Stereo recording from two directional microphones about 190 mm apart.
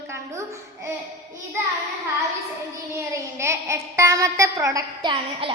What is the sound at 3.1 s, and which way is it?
A woman's voice, 15° right (ahead or behind).